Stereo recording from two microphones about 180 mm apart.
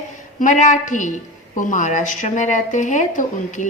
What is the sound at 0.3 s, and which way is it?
Speech, 45° left (ahead or behind).